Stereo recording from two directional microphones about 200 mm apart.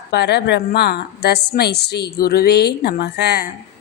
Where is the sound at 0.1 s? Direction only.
55° left (ahead or behind).